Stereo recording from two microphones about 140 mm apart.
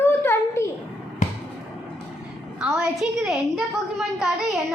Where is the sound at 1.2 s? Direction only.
60° left (ahead or behind).